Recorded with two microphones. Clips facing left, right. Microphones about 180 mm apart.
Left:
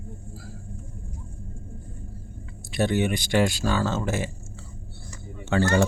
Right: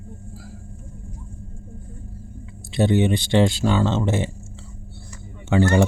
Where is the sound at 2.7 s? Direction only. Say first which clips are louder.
Right 5 dB; 20° right (ahead or behind).